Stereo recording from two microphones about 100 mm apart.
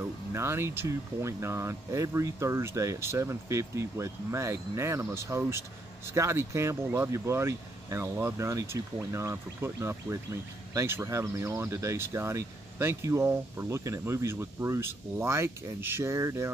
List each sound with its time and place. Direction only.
0.3 s speech: 25° right (ahead or behind)